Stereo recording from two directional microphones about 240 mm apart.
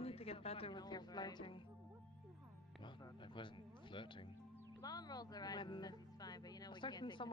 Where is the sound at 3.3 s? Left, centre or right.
Centre.